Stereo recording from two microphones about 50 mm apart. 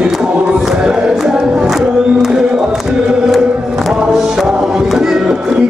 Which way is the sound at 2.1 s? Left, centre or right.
Centre.